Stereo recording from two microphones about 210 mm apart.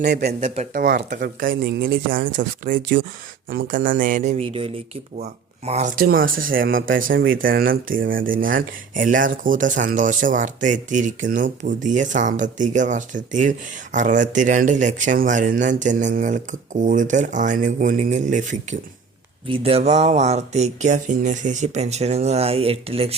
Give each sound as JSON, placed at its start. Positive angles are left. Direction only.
{"t": 0.0, "sound": "speech", "side_deg": -50}
{"t": 0.3, "sound": "speech", "side_deg": -35}
{"t": 7.1, "sound": "speech", "side_deg": -65}
{"t": 7.4, "sound": "speech", "side_deg": -45}
{"t": 19.5, "sound": "speech", "side_deg": -25}